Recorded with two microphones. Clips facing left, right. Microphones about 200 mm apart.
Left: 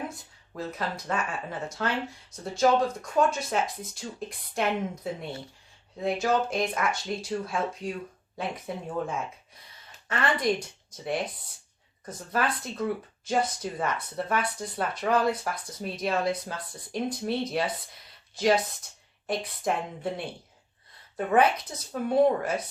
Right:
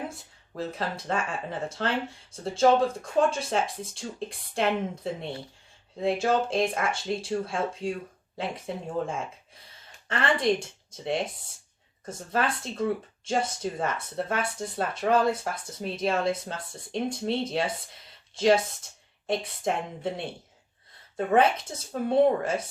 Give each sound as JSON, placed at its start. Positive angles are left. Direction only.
{"t": 0.1, "sound": "speech", "side_deg": -30}
{"t": 21.3, "sound": "speech", "side_deg": -25}